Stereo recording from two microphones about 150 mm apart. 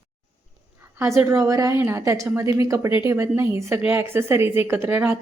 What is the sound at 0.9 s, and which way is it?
A woman's voice, 20° right (ahead or behind).